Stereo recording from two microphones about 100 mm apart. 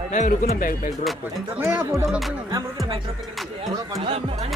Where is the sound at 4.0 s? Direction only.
85° right.